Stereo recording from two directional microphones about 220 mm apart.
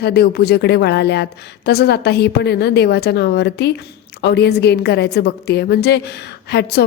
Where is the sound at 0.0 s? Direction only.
45° left (ahead or behind).